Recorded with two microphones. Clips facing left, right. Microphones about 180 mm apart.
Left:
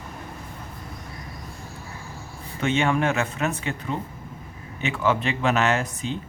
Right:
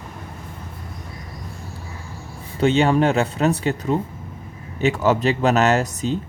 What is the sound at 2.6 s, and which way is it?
Speech, 35° right (ahead or behind).